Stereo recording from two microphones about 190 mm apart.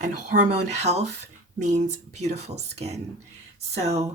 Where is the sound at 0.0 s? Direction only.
40° right (ahead or behind).